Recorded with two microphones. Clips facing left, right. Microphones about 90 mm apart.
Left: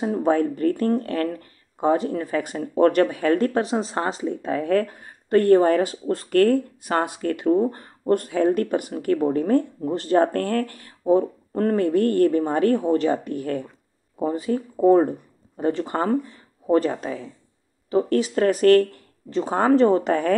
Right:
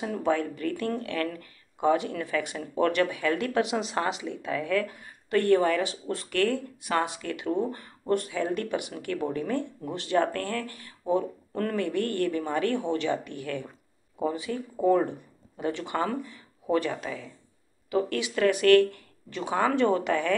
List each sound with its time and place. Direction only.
0.0 s speech: 35° left (ahead or behind)